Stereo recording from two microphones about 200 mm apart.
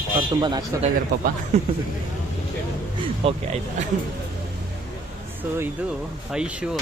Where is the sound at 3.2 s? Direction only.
30° right (ahead or behind).